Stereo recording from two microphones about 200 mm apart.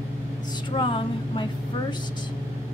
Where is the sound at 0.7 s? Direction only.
25° left (ahead or behind).